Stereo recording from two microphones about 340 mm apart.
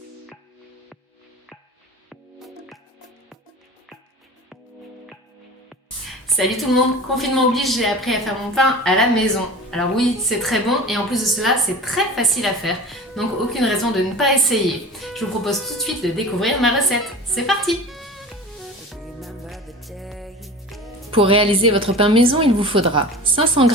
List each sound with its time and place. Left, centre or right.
6.2 s a woman's voice: centre
18.9 s music: centre
21.1 s a woman's voice: centre